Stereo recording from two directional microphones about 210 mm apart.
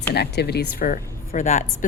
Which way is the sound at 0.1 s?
50° left (ahead or behind).